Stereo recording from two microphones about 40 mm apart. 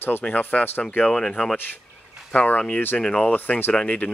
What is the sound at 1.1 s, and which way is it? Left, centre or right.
Speech, centre.